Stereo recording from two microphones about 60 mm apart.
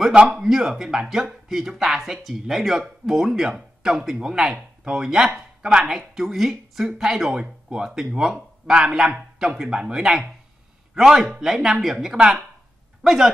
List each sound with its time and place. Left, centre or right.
0.0 s speech: centre
0.4 s a man's voice: centre